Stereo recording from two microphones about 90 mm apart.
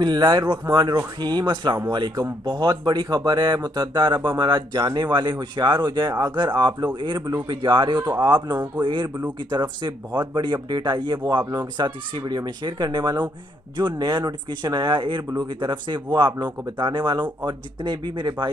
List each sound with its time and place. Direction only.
0.0 s speech: 55° right (ahead or behind)
8.8 s speech: 60° right (ahead or behind)